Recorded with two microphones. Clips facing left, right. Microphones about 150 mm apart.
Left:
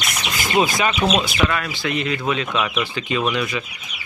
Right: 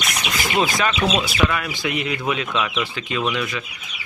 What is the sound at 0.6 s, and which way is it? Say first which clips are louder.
Speech: left 2 dB; 10° left (ahead or behind).